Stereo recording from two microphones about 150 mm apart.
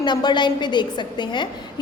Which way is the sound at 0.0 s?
30° left (ahead or behind).